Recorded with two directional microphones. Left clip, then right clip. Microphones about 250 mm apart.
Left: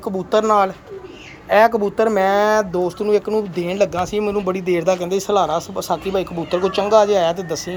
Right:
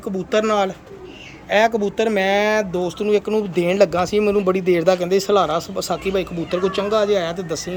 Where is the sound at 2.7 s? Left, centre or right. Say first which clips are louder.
Left 2 dB; left.